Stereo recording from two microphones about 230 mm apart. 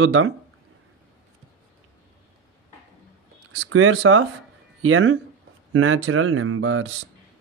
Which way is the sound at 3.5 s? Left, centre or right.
Right.